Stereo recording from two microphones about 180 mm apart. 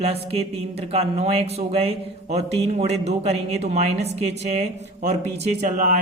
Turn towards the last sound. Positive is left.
turn(degrees=-45)  # may be behind; listen again after turning